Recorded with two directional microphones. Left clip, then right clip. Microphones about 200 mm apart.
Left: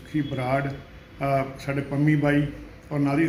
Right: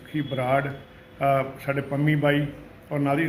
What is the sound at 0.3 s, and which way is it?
A man's voice, 15° right (ahead or behind).